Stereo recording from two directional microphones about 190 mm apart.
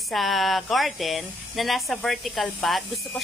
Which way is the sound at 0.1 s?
Centre (ahead or behind).